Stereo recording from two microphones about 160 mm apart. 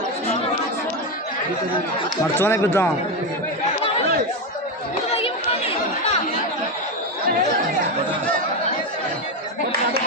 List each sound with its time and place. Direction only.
2.4 s speech: 15° left (ahead or behind)
5.1 s chatter: 35° left (ahead or behind)